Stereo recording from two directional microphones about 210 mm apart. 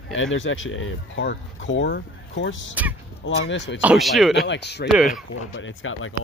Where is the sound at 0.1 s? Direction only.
65° left (ahead or behind).